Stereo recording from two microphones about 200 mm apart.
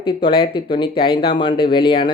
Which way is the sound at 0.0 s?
25° left (ahead or behind).